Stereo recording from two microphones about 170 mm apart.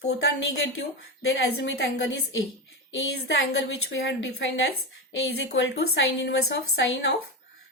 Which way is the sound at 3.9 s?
90° left.